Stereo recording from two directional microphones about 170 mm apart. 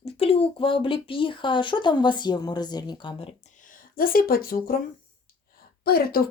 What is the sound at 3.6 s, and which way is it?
A woman's voice, 55° left (ahead or behind).